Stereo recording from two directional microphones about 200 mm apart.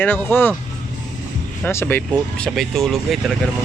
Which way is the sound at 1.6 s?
10° left (ahead or behind).